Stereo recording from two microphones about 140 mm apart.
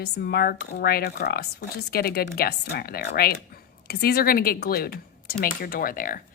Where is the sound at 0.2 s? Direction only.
90° left.